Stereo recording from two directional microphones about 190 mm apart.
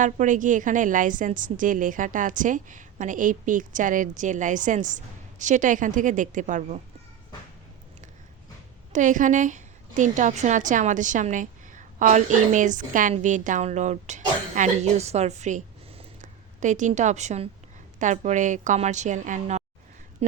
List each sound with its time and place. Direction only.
0.0 s a woman's voice: 40° right (ahead or behind)
8.9 s a woman's voice: 40° right (ahead or behind)